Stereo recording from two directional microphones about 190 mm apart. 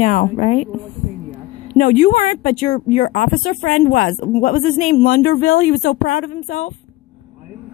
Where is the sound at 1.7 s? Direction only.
45° left (ahead or behind).